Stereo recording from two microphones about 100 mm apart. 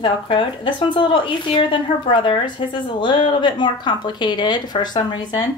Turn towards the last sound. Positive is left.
turn(degrees=45)  # may be behind; listen again after turning